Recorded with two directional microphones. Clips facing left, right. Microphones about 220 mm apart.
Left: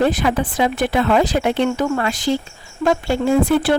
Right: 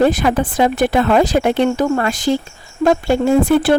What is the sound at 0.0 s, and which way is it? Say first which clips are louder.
Speech: right 3 dB; 45° right (ahead or behind).